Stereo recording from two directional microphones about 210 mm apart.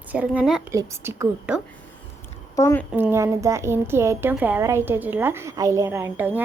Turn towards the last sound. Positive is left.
turn(degrees=-10)  # may be behind; listen again after turning